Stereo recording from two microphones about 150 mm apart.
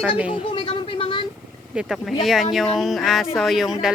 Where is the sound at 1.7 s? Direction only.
5° right (ahead or behind).